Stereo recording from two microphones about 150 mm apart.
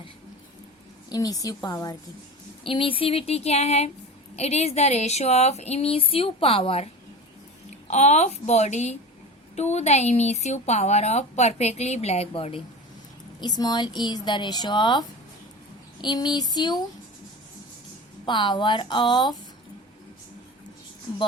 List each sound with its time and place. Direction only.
1.1 s a woman's voice: 25° left (ahead or behind)
2.6 s a woman's voice: 35° left (ahead or behind)
18.3 s a woman's voice: 30° left (ahead or behind)